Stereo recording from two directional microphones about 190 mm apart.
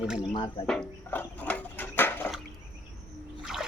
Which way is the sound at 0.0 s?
5° right (ahead or behind).